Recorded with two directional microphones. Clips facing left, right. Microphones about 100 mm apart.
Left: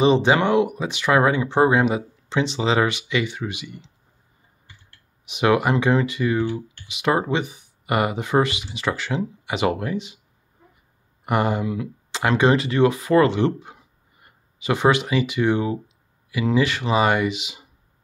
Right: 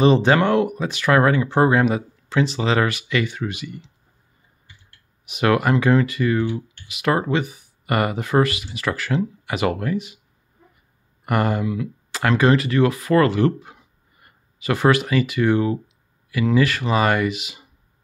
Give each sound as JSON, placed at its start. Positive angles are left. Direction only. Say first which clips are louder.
{"t": 0.0, "sound": "speech", "louder": "right 1 dB", "side_deg": 15}
{"t": 5.2, "sound": "speech", "louder": "even", "side_deg": 20}
{"t": 11.2, "sound": "speech", "louder": "even", "side_deg": 20}